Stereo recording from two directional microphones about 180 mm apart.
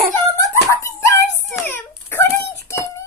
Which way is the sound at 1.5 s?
10° left (ahead or behind).